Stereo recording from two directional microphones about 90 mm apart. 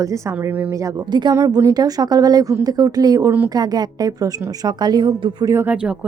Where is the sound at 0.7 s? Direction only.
30° right (ahead or behind).